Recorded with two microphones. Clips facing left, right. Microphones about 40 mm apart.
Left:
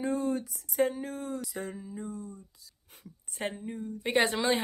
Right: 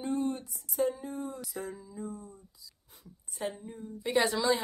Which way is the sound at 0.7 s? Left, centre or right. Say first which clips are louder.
Left 2 dB; left.